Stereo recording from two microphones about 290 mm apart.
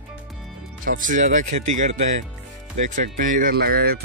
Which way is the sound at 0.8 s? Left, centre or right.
Right.